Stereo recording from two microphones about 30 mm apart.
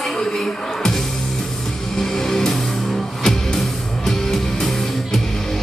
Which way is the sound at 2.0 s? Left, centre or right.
Centre.